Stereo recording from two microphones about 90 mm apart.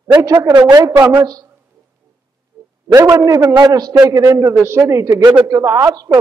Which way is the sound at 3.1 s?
40° right (ahead or behind).